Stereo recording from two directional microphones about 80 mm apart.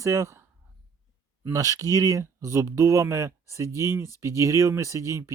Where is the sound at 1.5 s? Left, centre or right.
Right.